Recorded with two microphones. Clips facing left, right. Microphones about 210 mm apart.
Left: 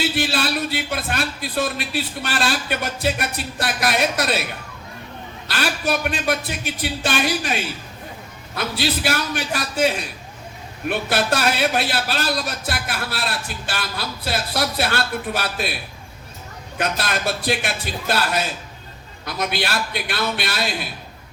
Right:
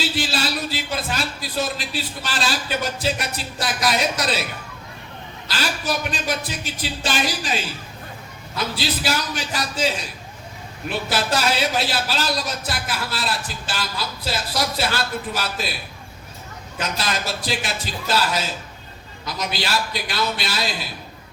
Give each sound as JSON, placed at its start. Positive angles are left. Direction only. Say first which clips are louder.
{"t": 0.0, "sound": "a man's voice", "louder": "left 2 dB", "side_deg": 60}
{"t": 5.5, "sound": "a man's voice", "louder": "left 3 dB", "side_deg": 60}
{"t": 16.7, "sound": "a man's voice", "louder": "left 2 dB", "side_deg": 60}